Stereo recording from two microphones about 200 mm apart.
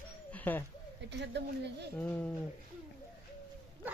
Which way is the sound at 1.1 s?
60° right (ahead or behind).